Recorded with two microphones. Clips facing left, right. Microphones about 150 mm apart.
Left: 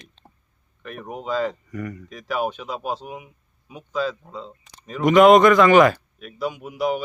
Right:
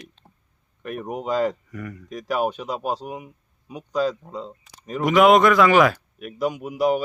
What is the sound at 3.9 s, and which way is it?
Speech, 40° right (ahead or behind).